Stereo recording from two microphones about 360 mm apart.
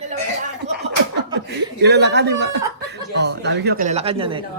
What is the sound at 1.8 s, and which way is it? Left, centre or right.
A woman's voice, right.